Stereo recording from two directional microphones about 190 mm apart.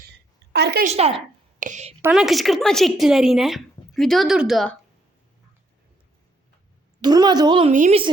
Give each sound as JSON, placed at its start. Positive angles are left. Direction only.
{"t": 0.5, "sound": "a woman's voice", "side_deg": -60}
{"t": 0.9, "sound": "a woman's voice", "side_deg": -35}
{"t": 2.0, "sound": "a woman's voice", "side_deg": -5}
{"t": 7.0, "sound": "a woman's voice", "side_deg": -20}
{"t": 7.7, "sound": "a woman's voice", "side_deg": -40}